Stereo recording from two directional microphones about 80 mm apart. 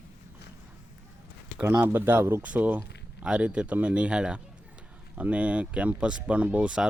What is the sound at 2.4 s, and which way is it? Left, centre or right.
Speech, centre.